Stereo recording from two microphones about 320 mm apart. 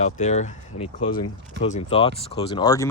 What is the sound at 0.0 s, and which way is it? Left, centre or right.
Speech, left.